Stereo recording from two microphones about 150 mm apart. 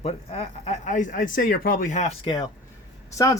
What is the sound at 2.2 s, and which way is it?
Speech, 30° left (ahead or behind).